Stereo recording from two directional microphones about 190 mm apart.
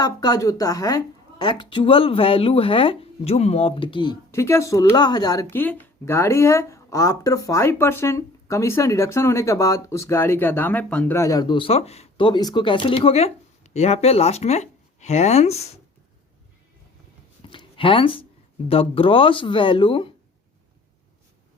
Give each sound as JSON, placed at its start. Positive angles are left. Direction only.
{"t": 0.0, "sound": "a woman's voice", "side_deg": 20}
{"t": 17.5, "sound": "a sound", "side_deg": 25}
{"t": 18.7, "sound": "speech", "side_deg": 30}